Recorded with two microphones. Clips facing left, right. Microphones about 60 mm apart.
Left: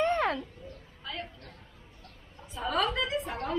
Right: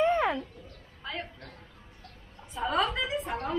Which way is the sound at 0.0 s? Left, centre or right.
Centre.